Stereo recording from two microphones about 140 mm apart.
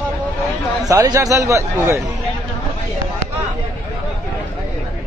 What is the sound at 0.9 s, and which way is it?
Speech, 25° right (ahead or behind).